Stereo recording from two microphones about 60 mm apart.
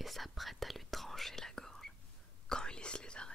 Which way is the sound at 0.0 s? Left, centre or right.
Centre.